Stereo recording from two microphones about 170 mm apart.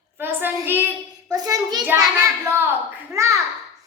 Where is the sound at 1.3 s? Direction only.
20° right (ahead or behind).